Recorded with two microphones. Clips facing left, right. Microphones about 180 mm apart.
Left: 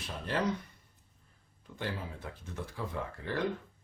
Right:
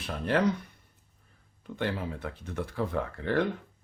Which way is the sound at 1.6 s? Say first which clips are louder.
Right 7 dB; 65° right (ahead or behind).